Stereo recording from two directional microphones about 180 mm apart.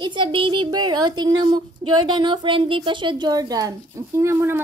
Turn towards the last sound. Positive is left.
turn(degrees=-15)  # may be behind; listen again after turning